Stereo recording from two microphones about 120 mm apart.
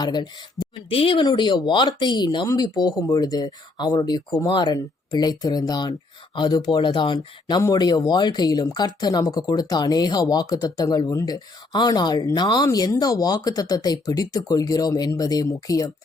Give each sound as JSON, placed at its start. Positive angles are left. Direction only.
{"t": 0.0, "sound": "speech", "side_deg": 35}
{"t": 0.9, "sound": "speech", "side_deg": 50}
{"t": 1.2, "sound": "speech", "side_deg": 40}